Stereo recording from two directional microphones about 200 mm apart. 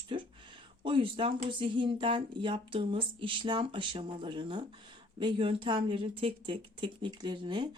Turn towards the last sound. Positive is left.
turn(degrees=-25)  # may be behind; listen again after turning